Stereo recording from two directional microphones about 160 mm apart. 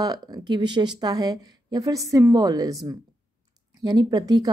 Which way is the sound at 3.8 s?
25° right (ahead or behind).